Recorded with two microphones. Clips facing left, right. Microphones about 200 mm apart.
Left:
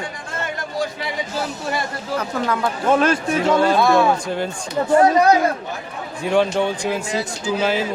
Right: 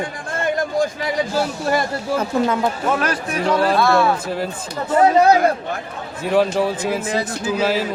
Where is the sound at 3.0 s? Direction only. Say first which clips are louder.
Left 3 dB; 25° left (ahead or behind).